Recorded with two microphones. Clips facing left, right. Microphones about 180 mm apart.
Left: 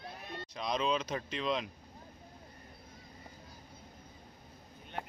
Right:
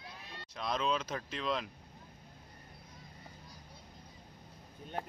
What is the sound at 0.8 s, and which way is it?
Speech, 10° left (ahead or behind).